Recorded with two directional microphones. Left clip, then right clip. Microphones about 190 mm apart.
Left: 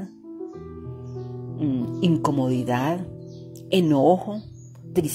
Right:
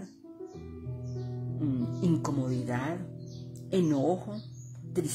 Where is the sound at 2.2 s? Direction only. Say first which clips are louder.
Left 10 dB; 25° left (ahead or behind).